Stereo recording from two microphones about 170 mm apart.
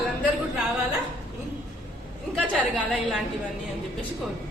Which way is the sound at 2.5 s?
Centre (ahead or behind).